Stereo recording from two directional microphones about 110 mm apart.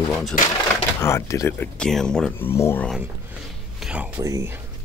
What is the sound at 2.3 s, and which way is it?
Speech, 20° left (ahead or behind).